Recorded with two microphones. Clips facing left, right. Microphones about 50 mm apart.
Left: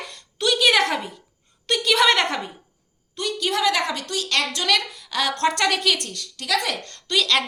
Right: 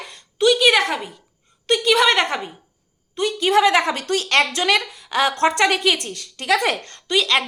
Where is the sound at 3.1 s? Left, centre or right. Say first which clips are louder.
Right 7 dB; right.